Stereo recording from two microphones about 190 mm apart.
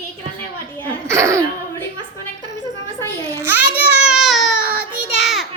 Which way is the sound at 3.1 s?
15° right (ahead or behind).